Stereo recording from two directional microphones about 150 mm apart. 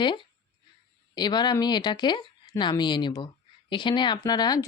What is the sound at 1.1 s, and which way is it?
A woman's voice, 30° left (ahead or behind).